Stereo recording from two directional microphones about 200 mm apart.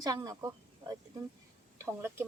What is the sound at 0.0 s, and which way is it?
Speech, 20° right (ahead or behind).